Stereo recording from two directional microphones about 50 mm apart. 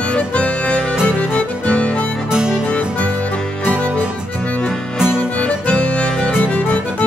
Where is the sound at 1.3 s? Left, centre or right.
Left.